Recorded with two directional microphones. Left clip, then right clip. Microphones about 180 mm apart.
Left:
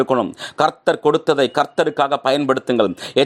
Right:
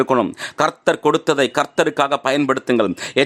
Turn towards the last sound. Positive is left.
turn(degrees=0)  # may be behind; listen again after turning